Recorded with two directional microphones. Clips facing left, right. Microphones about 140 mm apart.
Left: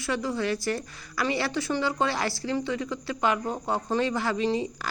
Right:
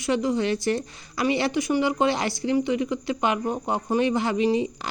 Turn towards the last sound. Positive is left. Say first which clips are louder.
# right 4 dB
turn(degrees=-20)  # may be behind; listen again after turning